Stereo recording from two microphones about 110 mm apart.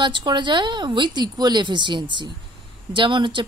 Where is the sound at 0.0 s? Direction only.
45° right (ahead or behind).